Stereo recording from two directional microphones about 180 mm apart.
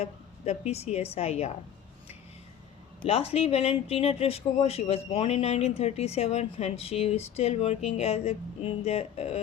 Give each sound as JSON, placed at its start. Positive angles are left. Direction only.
{"t": 0.0, "sound": "a woman's voice", "side_deg": 35}
{"t": 3.0, "sound": "a woman's voice", "side_deg": 35}